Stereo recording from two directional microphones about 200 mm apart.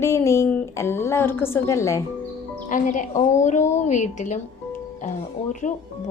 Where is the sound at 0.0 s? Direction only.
15° left (ahead or behind).